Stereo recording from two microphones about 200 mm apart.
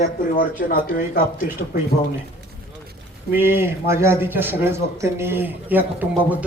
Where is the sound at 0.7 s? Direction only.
45° left (ahead or behind).